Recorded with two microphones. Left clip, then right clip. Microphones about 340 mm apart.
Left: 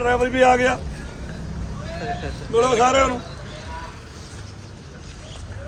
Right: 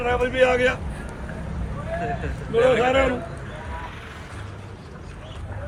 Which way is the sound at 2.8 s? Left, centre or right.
Centre.